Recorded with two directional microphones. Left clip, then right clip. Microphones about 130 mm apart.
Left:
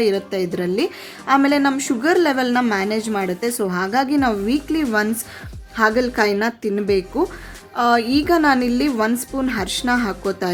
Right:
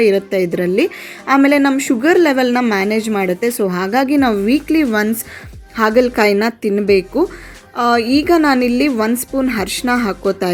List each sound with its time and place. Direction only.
0.0 s a woman's voice: 30° right (ahead or behind)